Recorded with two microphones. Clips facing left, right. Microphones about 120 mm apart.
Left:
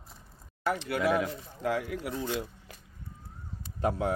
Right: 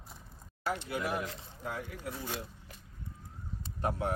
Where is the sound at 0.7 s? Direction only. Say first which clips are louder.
Left 6 dB; 65° left (ahead or behind); by 2.7 s 90° left.